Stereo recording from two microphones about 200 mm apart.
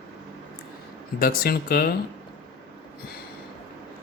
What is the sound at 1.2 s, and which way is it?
Speech, 50° left (ahead or behind).